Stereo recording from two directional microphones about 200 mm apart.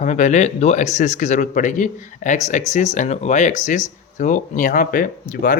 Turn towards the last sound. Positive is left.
turn(degrees=45)  # may be behind; listen again after turning